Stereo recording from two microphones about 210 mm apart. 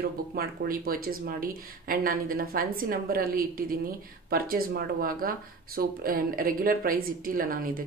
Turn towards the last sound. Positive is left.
turn(degrees=-40)  # may be behind; listen again after turning